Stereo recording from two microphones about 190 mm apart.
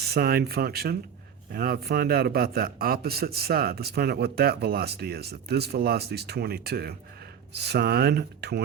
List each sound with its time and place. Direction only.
0.0 s speech: 55° right (ahead or behind)